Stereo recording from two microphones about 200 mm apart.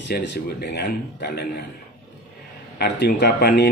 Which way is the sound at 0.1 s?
55° left (ahead or behind).